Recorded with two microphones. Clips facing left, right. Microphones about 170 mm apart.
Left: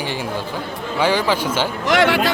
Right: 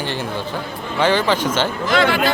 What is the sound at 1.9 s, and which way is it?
Speech, 75° left (ahead or behind).